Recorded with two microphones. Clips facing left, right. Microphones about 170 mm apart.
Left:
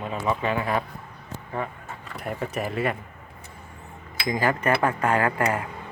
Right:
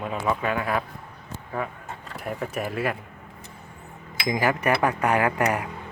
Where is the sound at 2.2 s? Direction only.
Centre (ahead or behind).